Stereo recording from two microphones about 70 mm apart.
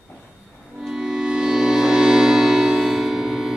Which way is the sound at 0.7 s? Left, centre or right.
Centre.